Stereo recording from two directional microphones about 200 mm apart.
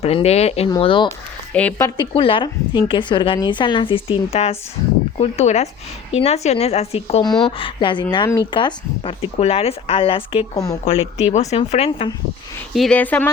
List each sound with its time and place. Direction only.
0.0 s a woman's voice: 30° left (ahead or behind)
12.7 s speech: 5° left (ahead or behind)